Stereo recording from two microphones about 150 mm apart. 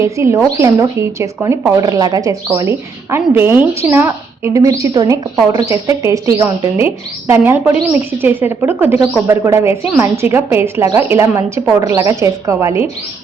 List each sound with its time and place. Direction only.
0.0 s a woman's voice: 20° right (ahead or behind)